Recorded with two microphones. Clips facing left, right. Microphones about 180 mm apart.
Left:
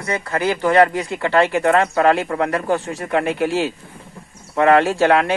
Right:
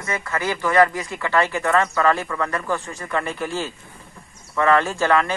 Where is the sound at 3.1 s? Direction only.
65° left (ahead or behind).